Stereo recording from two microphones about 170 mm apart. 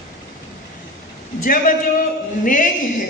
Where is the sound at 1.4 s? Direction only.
55° left (ahead or behind).